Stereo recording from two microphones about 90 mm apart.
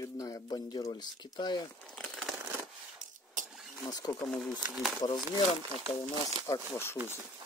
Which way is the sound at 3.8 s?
40° left (ahead or behind).